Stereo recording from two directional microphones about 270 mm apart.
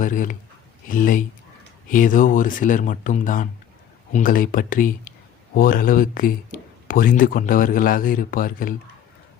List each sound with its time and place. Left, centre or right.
0.0 s speech: left